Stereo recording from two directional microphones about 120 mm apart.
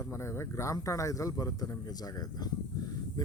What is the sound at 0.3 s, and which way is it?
Speech, 25° left (ahead or behind).